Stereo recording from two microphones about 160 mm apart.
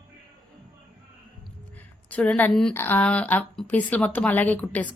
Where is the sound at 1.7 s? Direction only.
10° left (ahead or behind).